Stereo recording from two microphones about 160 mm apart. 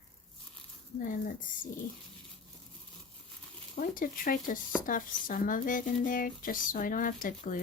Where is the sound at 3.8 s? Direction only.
60° left (ahead or behind).